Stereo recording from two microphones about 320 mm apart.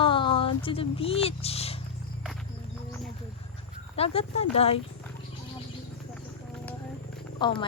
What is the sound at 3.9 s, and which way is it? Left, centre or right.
Speech, centre.